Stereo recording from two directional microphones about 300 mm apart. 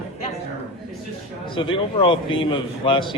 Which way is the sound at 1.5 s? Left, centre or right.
Centre.